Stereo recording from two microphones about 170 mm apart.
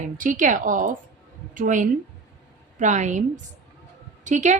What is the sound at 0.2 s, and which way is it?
A woman's voice, 50° right (ahead or behind).